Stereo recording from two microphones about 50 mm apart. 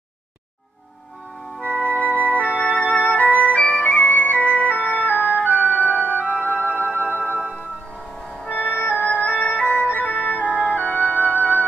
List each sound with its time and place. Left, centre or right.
1.6 s music: left
8.5 s music: left
10.2 s organ: left
10.5 s music: centre
10.8 s music: left